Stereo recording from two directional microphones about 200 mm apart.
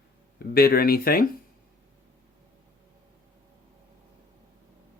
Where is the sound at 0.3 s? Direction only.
50° left (ahead or behind).